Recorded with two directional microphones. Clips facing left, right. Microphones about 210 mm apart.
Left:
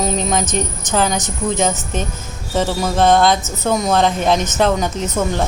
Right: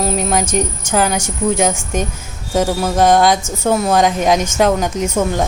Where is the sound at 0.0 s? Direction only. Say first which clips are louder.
Right 1 dB; 5° right (ahead or behind).